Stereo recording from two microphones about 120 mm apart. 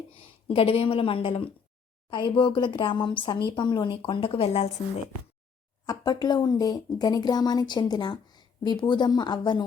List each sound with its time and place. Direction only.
0.4 s speech: 50° left (ahead or behind)
5.8 s speech: 35° left (ahead or behind)